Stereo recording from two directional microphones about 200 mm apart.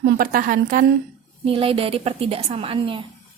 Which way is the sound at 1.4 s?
30° right (ahead or behind).